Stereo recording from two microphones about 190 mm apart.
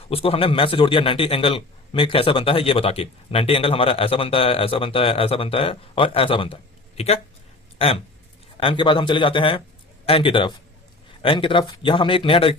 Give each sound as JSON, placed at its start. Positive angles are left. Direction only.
{"t": 0.1, "sound": "a man's voice", "side_deg": 30}